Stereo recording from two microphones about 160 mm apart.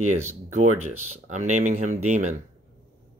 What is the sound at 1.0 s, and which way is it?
Speech, 50° right (ahead or behind).